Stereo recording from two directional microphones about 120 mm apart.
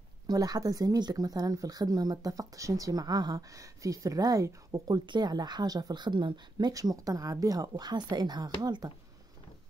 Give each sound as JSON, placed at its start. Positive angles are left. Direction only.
{"t": 0.3, "sound": "speech", "side_deg": -30}